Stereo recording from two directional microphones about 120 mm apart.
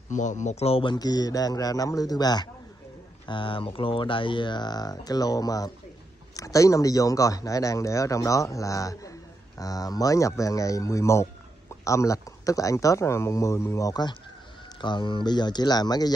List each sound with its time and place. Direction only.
0.1 s a man's voice: 90° left; by 0.8 s 60° left (ahead or behind)
0.8 s speech: 35° left (ahead or behind)
3.3 s speech: 45° left (ahead or behind)